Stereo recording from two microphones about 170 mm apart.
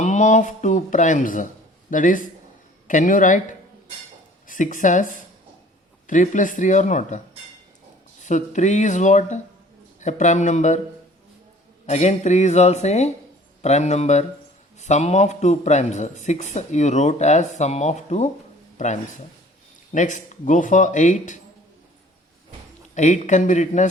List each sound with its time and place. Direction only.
0.0 s a man's voice: 45° left (ahead or behind)
4.4 s speech: 50° left (ahead or behind)
6.1 s a man's voice: 50° left (ahead or behind)
8.2 s a man's voice: 45° left (ahead or behind)
11.9 s a man's voice: 45° left (ahead or behind)
19.9 s a man's voice: 45° left (ahead or behind)
23.0 s a man's voice: 45° left (ahead or behind)